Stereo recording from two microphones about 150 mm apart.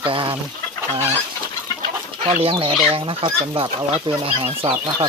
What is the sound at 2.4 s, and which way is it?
Speech, 35° right (ahead or behind).